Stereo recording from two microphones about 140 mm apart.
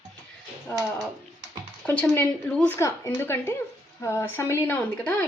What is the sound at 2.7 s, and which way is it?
A woman's voice, 20° left (ahead or behind).